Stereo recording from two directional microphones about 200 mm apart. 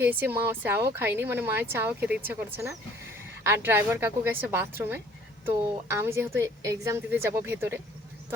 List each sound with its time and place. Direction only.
0.0 s speech: 10° right (ahead or behind)